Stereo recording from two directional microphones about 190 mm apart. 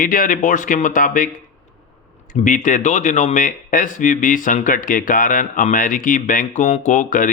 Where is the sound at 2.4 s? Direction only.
40° left (ahead or behind).